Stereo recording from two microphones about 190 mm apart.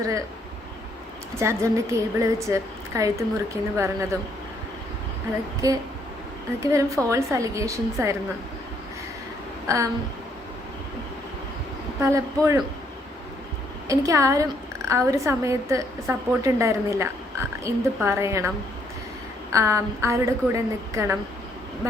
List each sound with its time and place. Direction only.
1.4 s a woman's voice: 15° right (ahead or behind)
5.6 s a woman's voice: 20° right (ahead or behind)
9.6 s a woman's voice: 15° right (ahead or behind)
11.9 s a woman's voice: 15° right (ahead or behind)
13.8 s a woman's voice: 15° right (ahead or behind)